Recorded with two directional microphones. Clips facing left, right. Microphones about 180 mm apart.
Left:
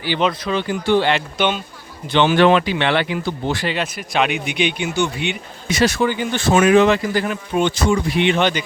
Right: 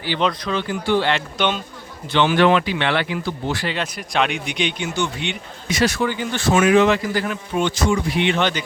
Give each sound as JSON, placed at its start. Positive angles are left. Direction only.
{"t": 0.1, "sound": "speech", "side_deg": 5}
{"t": 0.5, "sound": "speech", "side_deg": 20}
{"t": 2.1, "sound": "speech", "side_deg": 25}
{"t": 3.8, "sound": "speech", "side_deg": 5}
{"t": 5.6, "sound": "speech", "side_deg": 25}
{"t": 6.5, "sound": "speech", "side_deg": 35}